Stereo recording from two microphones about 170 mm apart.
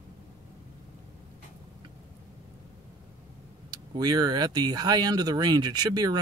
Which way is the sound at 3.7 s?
25° right (ahead or behind).